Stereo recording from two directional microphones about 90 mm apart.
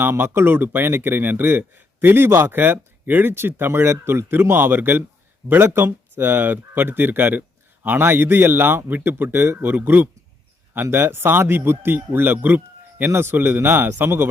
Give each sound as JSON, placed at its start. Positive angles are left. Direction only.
{"t": 0.0, "sound": "speech", "side_deg": -25}